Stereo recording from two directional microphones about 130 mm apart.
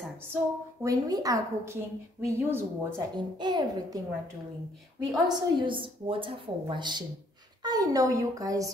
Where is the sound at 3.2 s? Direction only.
35° right (ahead or behind).